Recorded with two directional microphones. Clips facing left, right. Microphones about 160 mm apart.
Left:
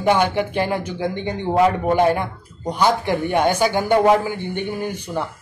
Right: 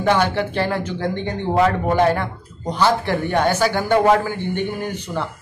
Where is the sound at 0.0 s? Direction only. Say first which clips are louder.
Even; 15° left (ahead or behind).